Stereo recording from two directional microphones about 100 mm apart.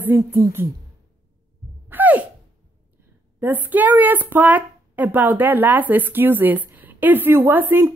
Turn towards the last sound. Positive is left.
turn(degrees=-20)  # may be behind; listen again after turning